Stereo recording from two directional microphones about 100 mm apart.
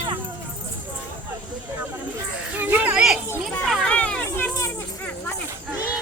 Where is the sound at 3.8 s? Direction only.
10° left (ahead or behind).